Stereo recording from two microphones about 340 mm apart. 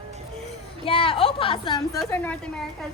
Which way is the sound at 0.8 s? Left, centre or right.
Centre.